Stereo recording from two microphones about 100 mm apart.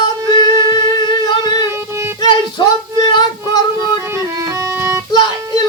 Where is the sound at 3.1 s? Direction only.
45° left (ahead or behind).